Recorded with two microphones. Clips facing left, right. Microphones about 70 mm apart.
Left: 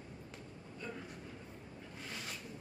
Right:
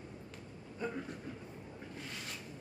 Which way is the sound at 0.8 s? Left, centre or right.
Centre.